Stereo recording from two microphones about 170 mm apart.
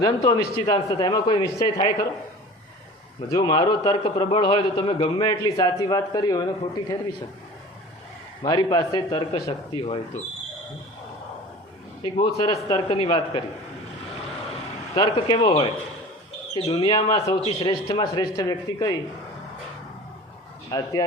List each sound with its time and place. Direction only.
0.0 s a man's voice: 20° left (ahead or behind)
3.2 s a man's voice: 25° left (ahead or behind)
8.4 s a man's voice: 25° left (ahead or behind)
12.1 s a man's voice: 25° left (ahead or behind)
14.9 s a man's voice: 25° left (ahead or behind)
20.7 s a man's voice: 25° left (ahead or behind)